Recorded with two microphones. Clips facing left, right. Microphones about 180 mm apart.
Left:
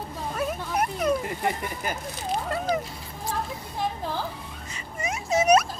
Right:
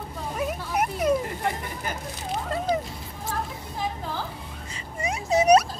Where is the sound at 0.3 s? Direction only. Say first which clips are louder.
Even; 15° right (ahead or behind).